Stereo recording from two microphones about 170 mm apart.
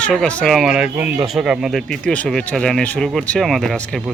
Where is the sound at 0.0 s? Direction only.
5° left (ahead or behind).